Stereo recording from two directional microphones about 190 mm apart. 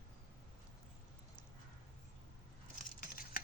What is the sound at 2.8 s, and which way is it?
Scissors, 50° left (ahead or behind).